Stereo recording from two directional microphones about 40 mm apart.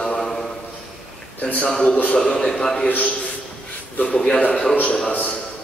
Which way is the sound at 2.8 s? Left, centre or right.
Left.